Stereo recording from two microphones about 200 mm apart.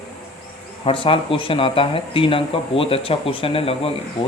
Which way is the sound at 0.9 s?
25° left (ahead or behind).